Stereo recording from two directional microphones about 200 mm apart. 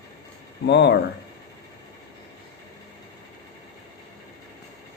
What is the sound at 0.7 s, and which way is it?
Speech, 55° left (ahead or behind).